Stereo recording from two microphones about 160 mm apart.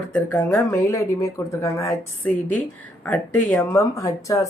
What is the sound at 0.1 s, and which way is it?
Speech, 10° left (ahead or behind).